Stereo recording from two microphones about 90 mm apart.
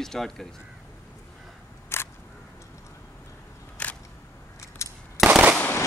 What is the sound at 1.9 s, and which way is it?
Single-lens reflex camera, 30° left (ahead or behind).